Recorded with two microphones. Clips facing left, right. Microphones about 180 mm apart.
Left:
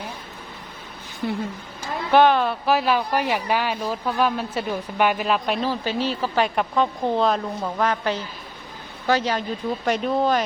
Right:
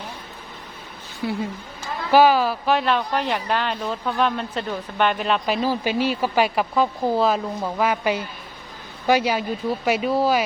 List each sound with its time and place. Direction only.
1.2 s speech: 5° right (ahead or behind)
5.6 s speech: 10° right (ahead or behind)